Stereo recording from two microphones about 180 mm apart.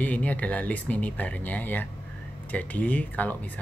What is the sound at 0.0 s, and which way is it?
Speech, 10° left (ahead or behind).